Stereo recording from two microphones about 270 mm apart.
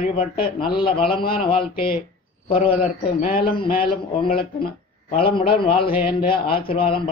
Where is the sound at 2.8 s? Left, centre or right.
Left.